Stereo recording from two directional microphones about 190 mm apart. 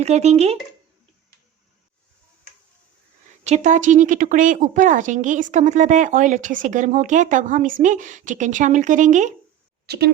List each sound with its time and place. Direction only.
0.0 s a woman's voice: 35° right (ahead or behind)
3.4 s a woman's voice: 40° right (ahead or behind)
9.8 s speech: 55° right (ahead or behind)